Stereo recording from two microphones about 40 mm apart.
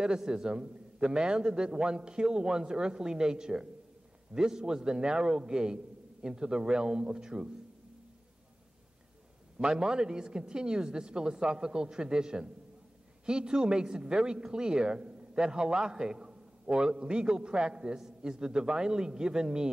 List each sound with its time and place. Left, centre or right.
0.0 s speech: centre
9.6 s speech: centre